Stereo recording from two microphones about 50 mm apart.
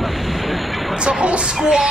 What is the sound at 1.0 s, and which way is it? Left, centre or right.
Speech, centre.